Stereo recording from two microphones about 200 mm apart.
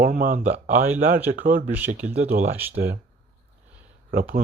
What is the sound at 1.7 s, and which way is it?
Speech, 10° right (ahead or behind).